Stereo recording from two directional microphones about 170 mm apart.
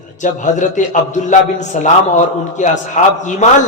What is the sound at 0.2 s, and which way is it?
A man's voice, 45° left (ahead or behind).